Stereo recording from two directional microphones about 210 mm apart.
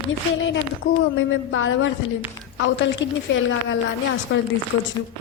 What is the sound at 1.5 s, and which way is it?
Speech, 70° left (ahead or behind).